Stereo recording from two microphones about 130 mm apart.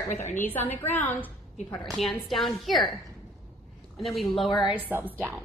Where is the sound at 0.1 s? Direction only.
70° left (ahead or behind).